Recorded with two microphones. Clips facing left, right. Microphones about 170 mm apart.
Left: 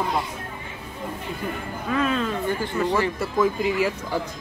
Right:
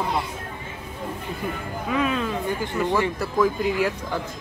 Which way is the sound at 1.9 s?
10° right (ahead or behind).